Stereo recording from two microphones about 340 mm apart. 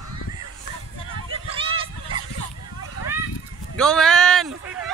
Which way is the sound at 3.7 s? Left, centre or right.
Centre.